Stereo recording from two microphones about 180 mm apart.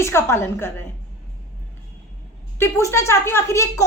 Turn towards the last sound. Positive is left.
turn(degrees=15)  # may be behind; listen again after turning